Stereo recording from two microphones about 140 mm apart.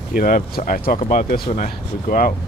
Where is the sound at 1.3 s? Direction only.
75° left (ahead or behind).